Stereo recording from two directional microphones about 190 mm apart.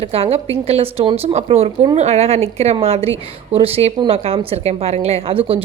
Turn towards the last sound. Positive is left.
turn(degrees=-30)  # may be behind; listen again after turning